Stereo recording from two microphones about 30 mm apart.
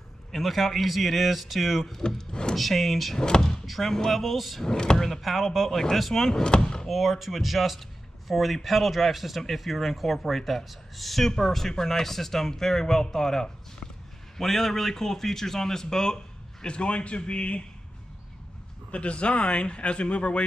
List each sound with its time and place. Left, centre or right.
0.3 s a man's voice: centre
2.0 s speech: left
2.5 s a man's voice: centre
3.2 s speech: left
3.6 s a man's voice: centre
4.6 s speech: left
4.9 s a man's voice: centre
6.4 s speech: left
6.9 s a man's voice: centre; by 16.2 s left
16.6 s speech: left
18.9 s speech: left